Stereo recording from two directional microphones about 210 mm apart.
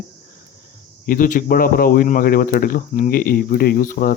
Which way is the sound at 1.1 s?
40° left (ahead or behind).